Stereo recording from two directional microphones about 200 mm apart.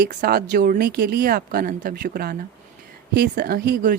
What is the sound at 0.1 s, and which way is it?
A woman's voice, 50° right (ahead or behind).